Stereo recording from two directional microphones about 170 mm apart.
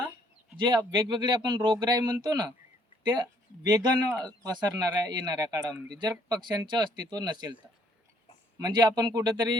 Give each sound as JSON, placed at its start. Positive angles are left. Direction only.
{"t": 0.5, "sound": "speech", "side_deg": -25}
{"t": 8.5, "sound": "speech", "side_deg": -25}